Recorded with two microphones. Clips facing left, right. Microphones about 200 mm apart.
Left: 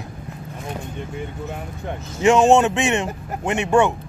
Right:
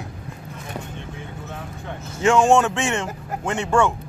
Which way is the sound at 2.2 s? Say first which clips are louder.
Left 2 dB; 20° left (ahead or behind).